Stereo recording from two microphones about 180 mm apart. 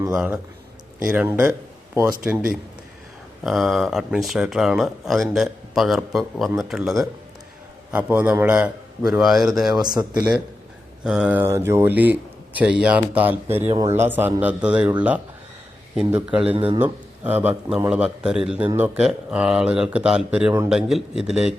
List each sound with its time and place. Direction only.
1.0 s a man's voice: 10° right (ahead or behind)
9.8 s speech: 25° right (ahead or behind)
11.0 s a man's voice: 5° right (ahead or behind)
16.0 s a man's voice: 5° right (ahead or behind)